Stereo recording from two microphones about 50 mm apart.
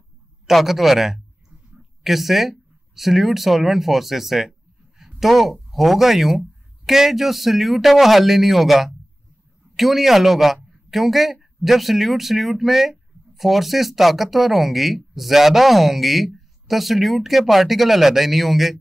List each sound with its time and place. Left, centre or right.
0.5 s speech: centre
1.1 s a sound: right
2.0 s speech: centre